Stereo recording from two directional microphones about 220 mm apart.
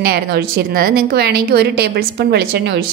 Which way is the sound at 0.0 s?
45° right (ahead or behind).